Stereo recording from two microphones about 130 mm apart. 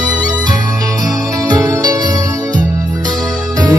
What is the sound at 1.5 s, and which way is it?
Music, 30° right (ahead or behind).